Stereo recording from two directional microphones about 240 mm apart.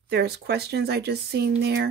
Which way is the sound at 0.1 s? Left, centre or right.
Right.